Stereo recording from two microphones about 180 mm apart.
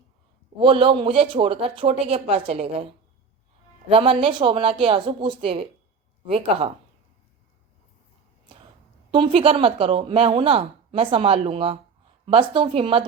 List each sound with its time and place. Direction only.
0.6 s a woman's voice: 30° right (ahead or behind)
9.1 s a woman's voice: 30° right (ahead or behind)